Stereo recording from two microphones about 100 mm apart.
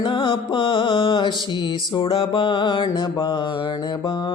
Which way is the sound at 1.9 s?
55° left (ahead or behind).